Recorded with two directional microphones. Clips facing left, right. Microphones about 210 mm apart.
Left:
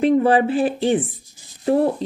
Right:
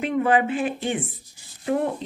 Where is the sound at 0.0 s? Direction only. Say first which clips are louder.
Left 6 dB; 35° left (ahead or behind).